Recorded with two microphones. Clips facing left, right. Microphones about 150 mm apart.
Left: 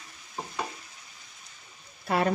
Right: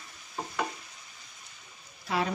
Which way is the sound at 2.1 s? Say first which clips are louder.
Left 3 dB; 55° left (ahead or behind).